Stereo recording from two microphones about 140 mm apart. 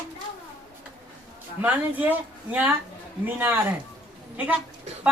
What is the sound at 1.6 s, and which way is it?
Speech, 10° right (ahead or behind).